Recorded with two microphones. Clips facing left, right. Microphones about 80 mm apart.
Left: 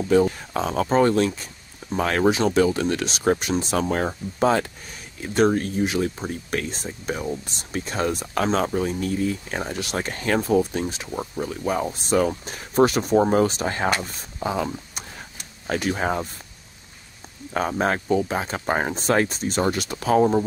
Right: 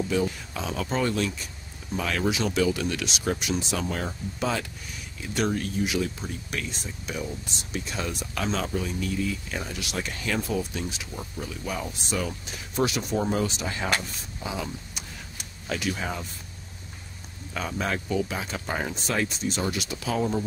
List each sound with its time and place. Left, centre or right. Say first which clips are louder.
0.1 s speech: left 8 dB; left
17.6 s speech: left 7 dB; left